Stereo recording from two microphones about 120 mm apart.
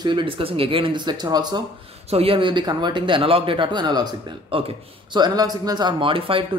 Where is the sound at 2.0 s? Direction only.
55° right (ahead or behind).